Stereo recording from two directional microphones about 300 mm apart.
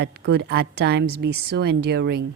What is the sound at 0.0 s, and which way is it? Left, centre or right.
A woman's voice, right.